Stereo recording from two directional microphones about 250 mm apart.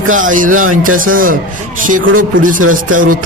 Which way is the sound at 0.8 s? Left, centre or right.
Right.